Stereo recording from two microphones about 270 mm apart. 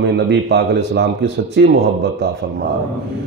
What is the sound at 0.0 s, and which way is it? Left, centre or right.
A man's voice, right.